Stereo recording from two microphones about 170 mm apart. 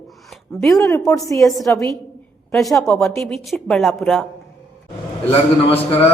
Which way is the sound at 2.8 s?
15° left (ahead or behind).